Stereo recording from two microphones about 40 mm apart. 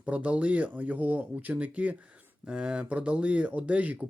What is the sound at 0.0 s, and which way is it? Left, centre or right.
Speech, right.